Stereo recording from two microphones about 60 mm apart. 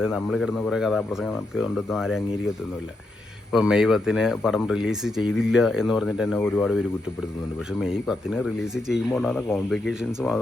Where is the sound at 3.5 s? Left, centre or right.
Centre.